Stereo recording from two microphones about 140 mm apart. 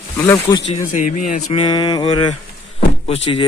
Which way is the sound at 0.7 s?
60° left (ahead or behind).